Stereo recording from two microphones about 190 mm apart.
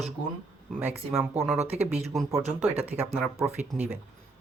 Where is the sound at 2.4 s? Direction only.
35° right (ahead or behind).